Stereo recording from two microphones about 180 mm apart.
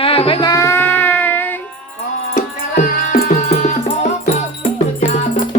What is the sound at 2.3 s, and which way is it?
Music, 45° left (ahead or behind).